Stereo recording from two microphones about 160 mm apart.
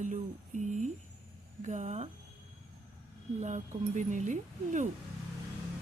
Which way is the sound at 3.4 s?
50° right (ahead or behind).